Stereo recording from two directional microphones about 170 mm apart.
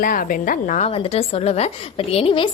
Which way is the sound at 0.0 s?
55° left (ahead or behind).